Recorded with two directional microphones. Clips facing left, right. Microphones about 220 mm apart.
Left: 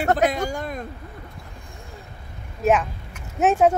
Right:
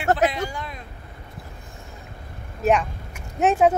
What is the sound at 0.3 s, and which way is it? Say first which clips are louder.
Speech: left 4 dB; 45° left (ahead or behind).